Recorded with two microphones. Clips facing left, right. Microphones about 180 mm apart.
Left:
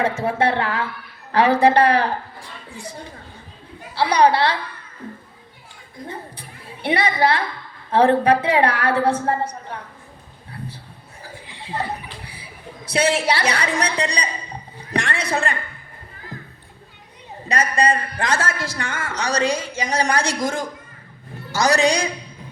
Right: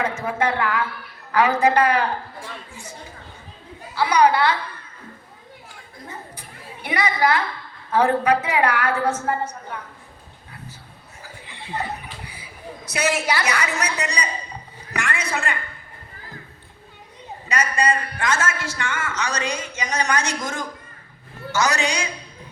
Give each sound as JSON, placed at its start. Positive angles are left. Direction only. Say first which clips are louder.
{"t": 0.0, "sound": "a woman's voice", "louder": "left 3 dB", "side_deg": 30}
{"t": 3.9, "sound": "a man's voice", "louder": "left 1 dB", "side_deg": 30}
{"t": 6.8, "sound": "a woman's voice", "louder": "left 2 dB", "side_deg": 30}
{"t": 12.3, "sound": "a woman's voice", "louder": "right 1 dB", "side_deg": 30}
{"t": 17.5, "sound": "a man's voice", "louder": "left 2 dB", "side_deg": 35}